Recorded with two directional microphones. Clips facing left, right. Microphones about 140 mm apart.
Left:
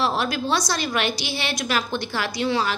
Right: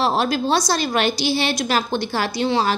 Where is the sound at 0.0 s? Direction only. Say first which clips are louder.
Right 4 dB; 30° right (ahead or behind).